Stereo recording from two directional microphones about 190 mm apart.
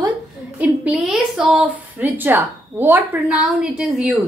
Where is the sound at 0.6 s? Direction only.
5° right (ahead or behind).